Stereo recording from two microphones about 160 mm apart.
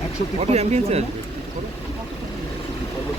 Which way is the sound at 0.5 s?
40° right (ahead or behind).